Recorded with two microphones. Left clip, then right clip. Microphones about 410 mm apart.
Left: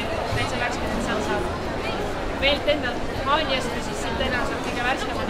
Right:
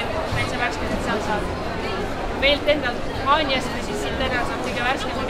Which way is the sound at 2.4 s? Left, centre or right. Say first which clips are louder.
Right 3 dB; centre.